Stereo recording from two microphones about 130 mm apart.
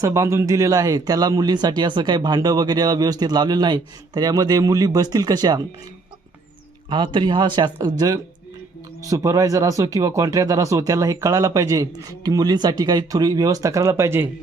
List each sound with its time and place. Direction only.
0.0 s speech: 25° right (ahead or behind)
6.9 s speech: 40° right (ahead or behind); by 14.3 s 20° right (ahead or behind)